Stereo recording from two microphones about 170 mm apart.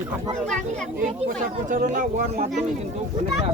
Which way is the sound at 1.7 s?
50° right (ahead or behind).